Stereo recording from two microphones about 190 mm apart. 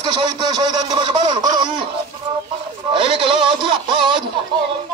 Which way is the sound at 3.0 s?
25° right (ahead or behind).